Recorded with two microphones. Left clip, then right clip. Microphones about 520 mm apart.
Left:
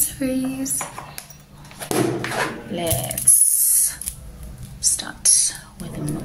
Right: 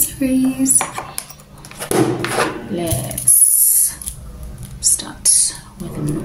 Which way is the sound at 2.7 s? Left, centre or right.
Left.